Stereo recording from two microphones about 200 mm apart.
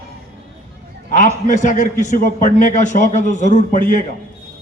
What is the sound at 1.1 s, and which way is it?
A man's voice, 40° left (ahead or behind).